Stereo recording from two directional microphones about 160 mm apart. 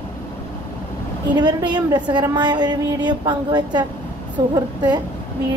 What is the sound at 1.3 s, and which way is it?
A woman's voice, 25° right (ahead or behind).